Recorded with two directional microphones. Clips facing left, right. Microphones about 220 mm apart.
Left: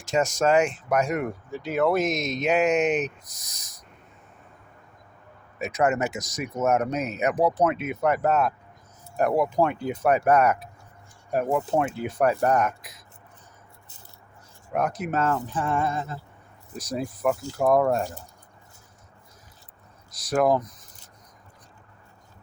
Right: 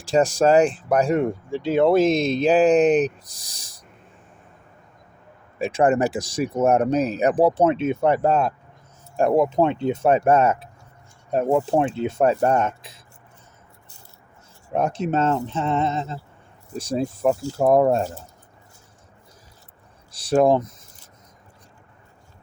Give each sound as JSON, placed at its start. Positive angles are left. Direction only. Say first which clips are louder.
{"t": 0.0, "sound": "speech", "louder": "right 5 dB", "side_deg": -30}
{"t": 5.5, "sound": "speech", "louder": "right 5 dB", "side_deg": -30}
{"t": 14.7, "sound": "speech", "louder": "right 4 dB", "side_deg": -25}
{"t": 20.1, "sound": "speech", "louder": "right 5 dB", "side_deg": -30}